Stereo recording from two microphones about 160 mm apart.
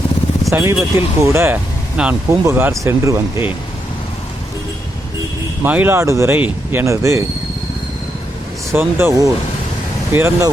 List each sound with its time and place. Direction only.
0.5 s speech: 15° right (ahead or behind)
5.6 s speech: 10° right (ahead or behind)
8.7 s speech: 15° right (ahead or behind)